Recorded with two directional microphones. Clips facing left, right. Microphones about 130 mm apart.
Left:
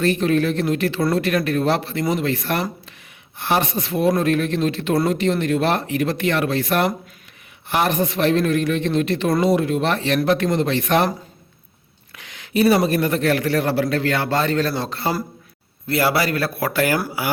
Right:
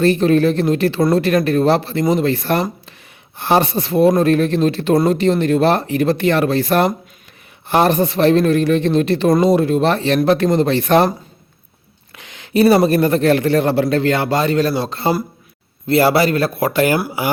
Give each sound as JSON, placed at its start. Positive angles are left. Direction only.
{"t": 0.0, "sound": "speech", "side_deg": -30}
{"t": 12.1, "sound": "a sound", "side_deg": -25}
{"t": 12.5, "sound": "a man's voice", "side_deg": -35}